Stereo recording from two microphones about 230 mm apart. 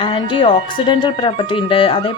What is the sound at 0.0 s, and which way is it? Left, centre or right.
Speech, left.